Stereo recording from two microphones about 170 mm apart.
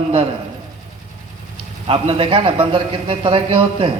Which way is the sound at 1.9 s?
30° right (ahead or behind).